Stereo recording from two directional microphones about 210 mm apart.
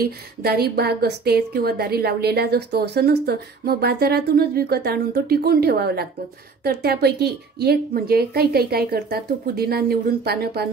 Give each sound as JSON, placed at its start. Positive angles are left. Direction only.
{"t": 0.0, "sound": "a woman's voice", "side_deg": -50}